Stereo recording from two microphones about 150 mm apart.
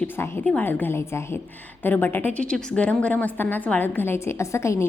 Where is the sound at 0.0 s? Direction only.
10° left (ahead or behind).